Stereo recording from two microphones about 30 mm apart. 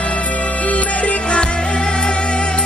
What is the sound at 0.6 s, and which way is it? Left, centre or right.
Music, left.